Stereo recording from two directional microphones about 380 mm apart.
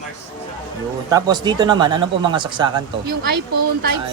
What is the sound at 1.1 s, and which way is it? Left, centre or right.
A man's voice, centre.